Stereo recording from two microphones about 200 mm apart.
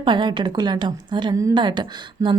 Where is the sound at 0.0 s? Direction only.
25° right (ahead or behind).